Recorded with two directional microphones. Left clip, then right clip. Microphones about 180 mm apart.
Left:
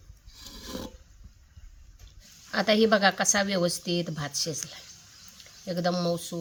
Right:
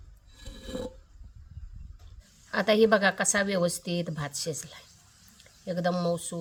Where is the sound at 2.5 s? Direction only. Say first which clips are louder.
Even; 20° right (ahead or behind).